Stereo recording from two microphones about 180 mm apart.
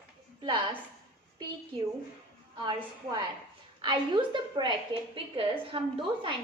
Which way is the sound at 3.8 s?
25° right (ahead or behind).